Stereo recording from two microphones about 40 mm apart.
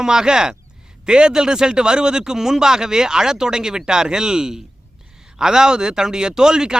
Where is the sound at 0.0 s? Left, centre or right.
Centre.